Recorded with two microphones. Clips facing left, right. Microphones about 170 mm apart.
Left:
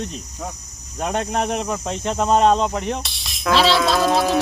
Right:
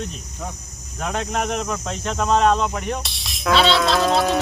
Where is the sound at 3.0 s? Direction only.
Centre (ahead or behind).